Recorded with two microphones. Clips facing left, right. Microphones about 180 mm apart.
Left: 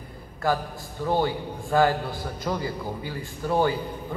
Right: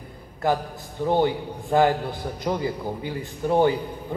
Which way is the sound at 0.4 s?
20° right (ahead or behind).